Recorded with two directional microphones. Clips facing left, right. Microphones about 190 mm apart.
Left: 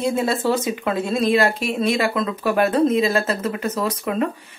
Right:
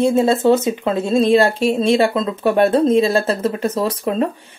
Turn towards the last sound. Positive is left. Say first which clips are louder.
# right 3 dB
turn(degrees=-30)  # may be behind; listen again after turning